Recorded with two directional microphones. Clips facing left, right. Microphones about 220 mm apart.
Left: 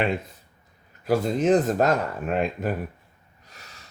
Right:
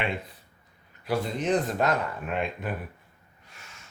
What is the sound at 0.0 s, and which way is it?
Speech, 45° left (ahead or behind).